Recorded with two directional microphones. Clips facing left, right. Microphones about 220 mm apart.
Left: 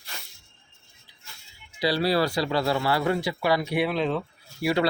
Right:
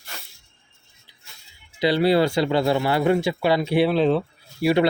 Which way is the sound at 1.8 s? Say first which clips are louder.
Right 5 dB; 25° right (ahead or behind).